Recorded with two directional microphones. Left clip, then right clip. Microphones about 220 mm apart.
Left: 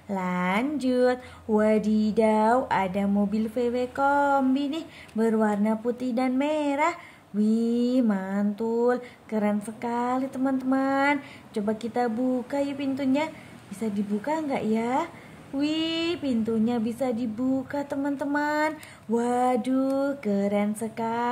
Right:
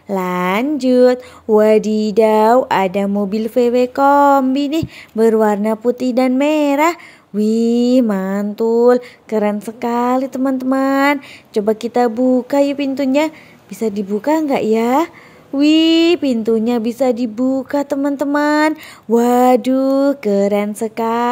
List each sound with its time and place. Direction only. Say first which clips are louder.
0.1 s speech: right 10 dB; 35° right (ahead or behind)